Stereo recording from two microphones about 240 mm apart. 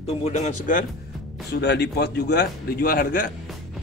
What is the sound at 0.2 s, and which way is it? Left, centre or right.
Speech, left.